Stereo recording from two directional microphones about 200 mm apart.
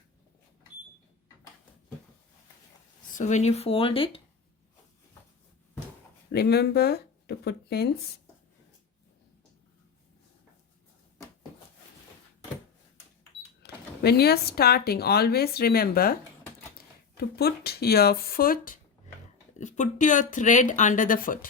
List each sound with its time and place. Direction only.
3.1 s speech: 40° left (ahead or behind)
6.3 s speech: 55° left (ahead or behind)
13.6 s speech: 55° left (ahead or behind)
17.2 s speech: 50° left (ahead or behind)